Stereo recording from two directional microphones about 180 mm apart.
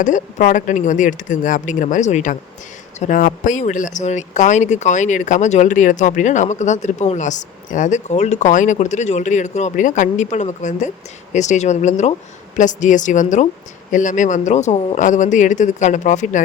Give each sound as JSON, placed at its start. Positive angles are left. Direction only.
{"t": 0.0, "sound": "speech", "side_deg": 45}